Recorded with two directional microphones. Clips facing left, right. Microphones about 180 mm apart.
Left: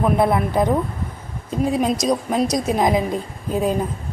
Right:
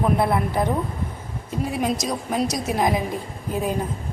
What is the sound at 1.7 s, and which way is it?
A woman's voice, 20° left (ahead or behind).